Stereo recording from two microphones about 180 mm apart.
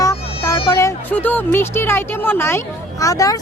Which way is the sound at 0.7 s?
15° left (ahead or behind).